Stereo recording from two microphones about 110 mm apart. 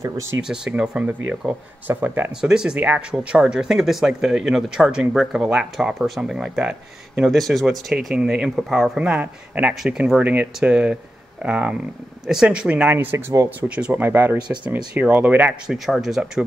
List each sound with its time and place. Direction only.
0.4 s speech: 10° right (ahead or behind)
2.4 s speech: 5° right (ahead or behind)